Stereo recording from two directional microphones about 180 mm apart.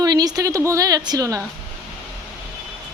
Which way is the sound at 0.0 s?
20° right (ahead or behind).